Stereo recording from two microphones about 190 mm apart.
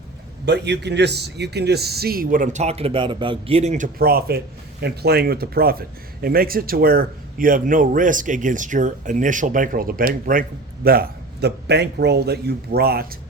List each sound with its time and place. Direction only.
0.4 s speech: 60° right (ahead or behind); by 3.8 s 35° right (ahead or behind)
3.9 s a man's voice: 50° right (ahead or behind)